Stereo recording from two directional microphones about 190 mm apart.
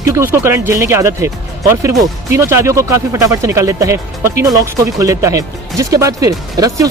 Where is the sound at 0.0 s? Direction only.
15° right (ahead or behind).